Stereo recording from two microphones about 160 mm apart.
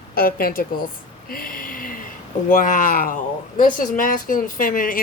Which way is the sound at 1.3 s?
65° left (ahead or behind).